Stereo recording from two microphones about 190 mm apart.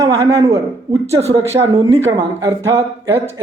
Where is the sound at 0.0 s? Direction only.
15° right (ahead or behind).